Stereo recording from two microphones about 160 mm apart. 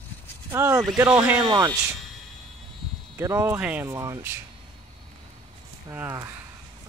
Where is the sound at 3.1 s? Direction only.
15° right (ahead or behind).